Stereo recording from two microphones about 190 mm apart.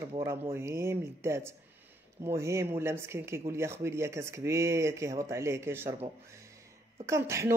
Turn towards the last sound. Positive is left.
turn(degrees=-15)  # may be behind; listen again after turning